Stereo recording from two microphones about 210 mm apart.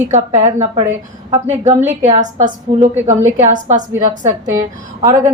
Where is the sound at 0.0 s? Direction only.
35° right (ahead or behind).